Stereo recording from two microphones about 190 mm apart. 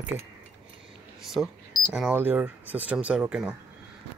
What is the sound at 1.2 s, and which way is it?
Speech, centre (ahead or behind).